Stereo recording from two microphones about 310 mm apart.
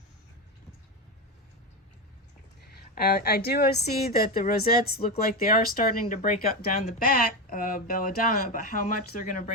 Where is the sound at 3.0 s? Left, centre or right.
Left.